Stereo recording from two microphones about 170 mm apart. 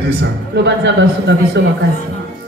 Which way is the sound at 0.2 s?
90° right.